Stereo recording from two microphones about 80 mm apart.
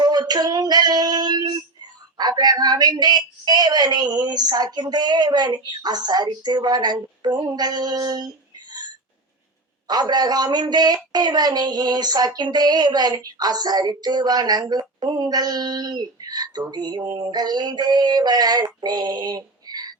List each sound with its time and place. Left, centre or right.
0.0 s female singing: right
2.1 s a woman's voice: right
9.8 s a woman's voice: right